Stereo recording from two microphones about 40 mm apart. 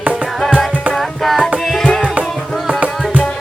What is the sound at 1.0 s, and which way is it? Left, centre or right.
Tabla, centre.